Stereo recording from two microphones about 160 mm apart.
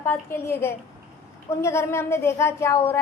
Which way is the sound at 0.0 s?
15° left (ahead or behind).